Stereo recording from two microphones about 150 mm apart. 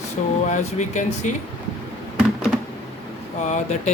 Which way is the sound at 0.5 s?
55° left (ahead or behind).